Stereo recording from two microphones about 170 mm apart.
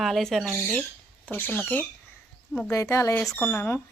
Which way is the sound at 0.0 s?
Centre (ahead or behind).